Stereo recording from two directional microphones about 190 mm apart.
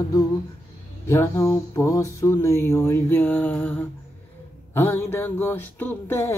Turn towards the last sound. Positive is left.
turn(degrees=10)  # may be behind; listen again after turning